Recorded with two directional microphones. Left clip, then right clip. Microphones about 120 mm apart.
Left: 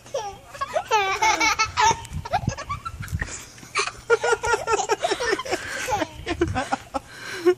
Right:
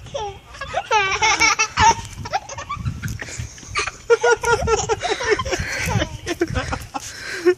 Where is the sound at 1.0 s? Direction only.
15° left (ahead or behind).